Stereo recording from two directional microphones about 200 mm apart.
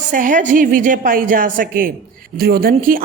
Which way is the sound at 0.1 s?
40° right (ahead or behind).